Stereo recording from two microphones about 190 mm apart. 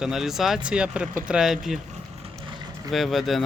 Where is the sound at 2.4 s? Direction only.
20° right (ahead or behind).